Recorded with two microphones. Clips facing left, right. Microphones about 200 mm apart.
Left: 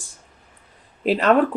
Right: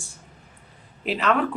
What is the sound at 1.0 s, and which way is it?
Speech, 35° left (ahead or behind).